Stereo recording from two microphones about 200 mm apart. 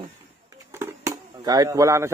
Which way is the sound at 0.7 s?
15° right (ahead or behind).